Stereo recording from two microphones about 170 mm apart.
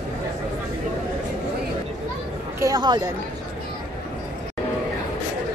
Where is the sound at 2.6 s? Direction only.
20° right (ahead or behind).